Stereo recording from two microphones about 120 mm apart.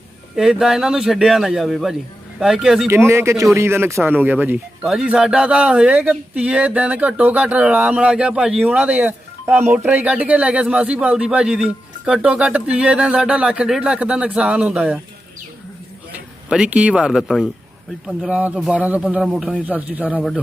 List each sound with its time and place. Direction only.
0.3 s speech: 5° right (ahead or behind)
2.8 s speech: 20° right (ahead or behind)
16.1 s speech: 10° right (ahead or behind)